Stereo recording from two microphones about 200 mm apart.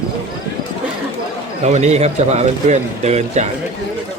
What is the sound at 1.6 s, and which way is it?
A man's voice, 35° right (ahead or behind).